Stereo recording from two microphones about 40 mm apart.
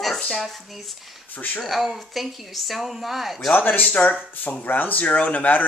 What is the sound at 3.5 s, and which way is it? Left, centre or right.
Speech, left.